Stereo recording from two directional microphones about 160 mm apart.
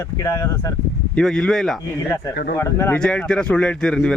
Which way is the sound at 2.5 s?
15° left (ahead or behind).